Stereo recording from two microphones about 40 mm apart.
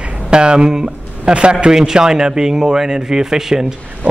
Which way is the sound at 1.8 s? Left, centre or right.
Centre.